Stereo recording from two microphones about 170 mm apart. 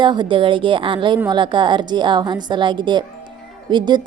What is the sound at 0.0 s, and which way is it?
A woman's voice, 25° right (ahead or behind).